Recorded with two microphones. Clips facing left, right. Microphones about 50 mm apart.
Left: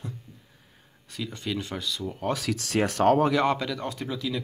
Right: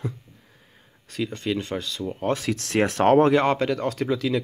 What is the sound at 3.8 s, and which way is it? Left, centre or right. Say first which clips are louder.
Speech: right 7 dB; right.